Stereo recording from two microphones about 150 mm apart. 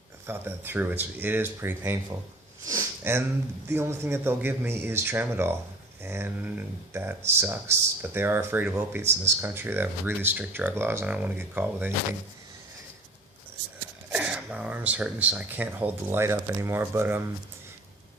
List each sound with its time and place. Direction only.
0.3 s speech: 15° right (ahead or behind)
2.6 s sniff: 15° right (ahead or behind)
3.7 s speech: 15° right (ahead or behind)
14.1 s speech: 5° right (ahead or behind)